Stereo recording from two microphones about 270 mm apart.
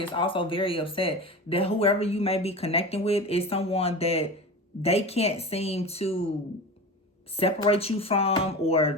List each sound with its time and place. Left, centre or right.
0.0 s speech: centre
7.3 s speech: left